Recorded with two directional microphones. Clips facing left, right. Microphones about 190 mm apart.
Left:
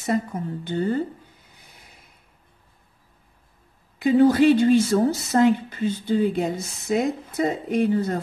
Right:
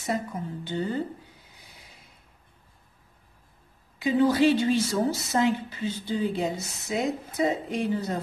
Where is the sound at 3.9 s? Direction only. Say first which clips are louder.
Left 6 dB; 50° left (ahead or behind).